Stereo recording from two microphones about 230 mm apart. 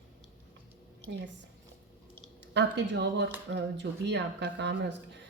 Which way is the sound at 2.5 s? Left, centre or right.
Right.